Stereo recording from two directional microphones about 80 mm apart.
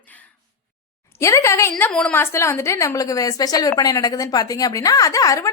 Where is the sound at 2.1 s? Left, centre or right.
Left.